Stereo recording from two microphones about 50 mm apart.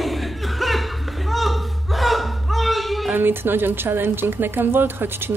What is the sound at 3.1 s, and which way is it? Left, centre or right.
A woman's voice, right.